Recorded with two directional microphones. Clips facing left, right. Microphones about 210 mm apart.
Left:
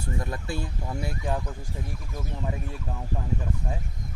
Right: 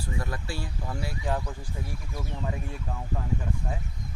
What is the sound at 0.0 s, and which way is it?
Speech, 20° left (ahead or behind).